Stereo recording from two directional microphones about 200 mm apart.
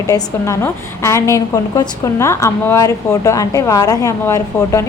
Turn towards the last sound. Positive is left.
turn(degrees=15)  # may be behind; listen again after turning